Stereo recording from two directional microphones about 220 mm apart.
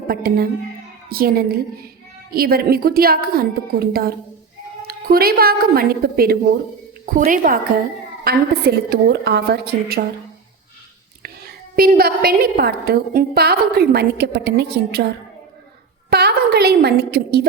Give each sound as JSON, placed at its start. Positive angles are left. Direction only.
{"t": 0.1, "sound": "a woman's voice", "side_deg": -45}
{"t": 11.8, "sound": "a woman's voice", "side_deg": -45}
{"t": 16.0, "sound": "a sound", "side_deg": -50}